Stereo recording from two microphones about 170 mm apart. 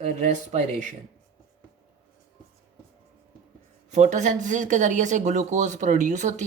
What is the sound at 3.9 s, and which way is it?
Speech, 45° right (ahead or behind).